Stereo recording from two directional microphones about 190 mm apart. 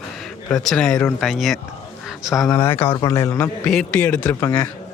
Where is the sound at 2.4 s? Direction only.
10° left (ahead or behind).